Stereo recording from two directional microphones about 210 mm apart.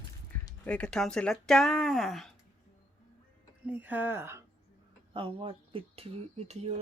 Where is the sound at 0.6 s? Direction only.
5° left (ahead or behind).